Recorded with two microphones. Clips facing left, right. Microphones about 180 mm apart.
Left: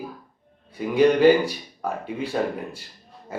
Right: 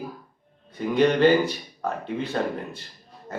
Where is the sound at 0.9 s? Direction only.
10° left (ahead or behind).